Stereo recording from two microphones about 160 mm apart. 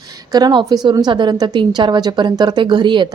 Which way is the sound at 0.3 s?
25° right (ahead or behind).